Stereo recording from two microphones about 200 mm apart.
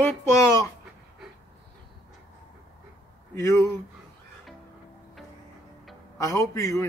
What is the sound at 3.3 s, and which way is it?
Speech, 15° left (ahead or behind).